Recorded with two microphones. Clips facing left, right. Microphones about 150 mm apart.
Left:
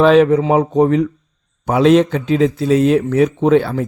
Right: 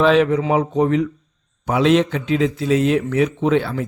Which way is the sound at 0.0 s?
40° left (ahead or behind).